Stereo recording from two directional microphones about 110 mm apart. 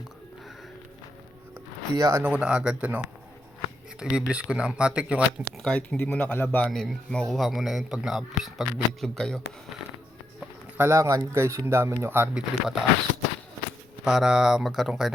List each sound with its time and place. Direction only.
2.0 s speech: 30° right (ahead or behind)
2.2 s speech: 10° right (ahead or behind)
4.0 s speech: 10° right (ahead or behind)
5.6 s speech: 10° left (ahead or behind)
6.7 s a man's voice: centre (ahead or behind)
10.8 s speech: 25° right (ahead or behind)
12.3 s a man's voice: 5° right (ahead or behind)
14.0 s a man's voice: 5° right (ahead or behind)